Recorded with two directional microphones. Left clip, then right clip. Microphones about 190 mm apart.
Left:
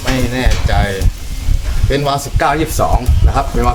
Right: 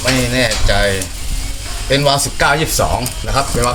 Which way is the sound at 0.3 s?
15° left (ahead or behind).